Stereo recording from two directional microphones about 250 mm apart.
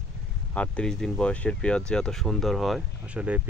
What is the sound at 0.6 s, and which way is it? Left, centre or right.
Speech, centre.